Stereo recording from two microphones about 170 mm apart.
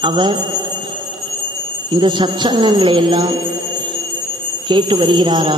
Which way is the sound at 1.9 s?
30° right (ahead or behind).